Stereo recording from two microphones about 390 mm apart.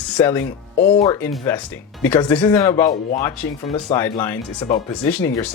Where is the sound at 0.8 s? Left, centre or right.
Left.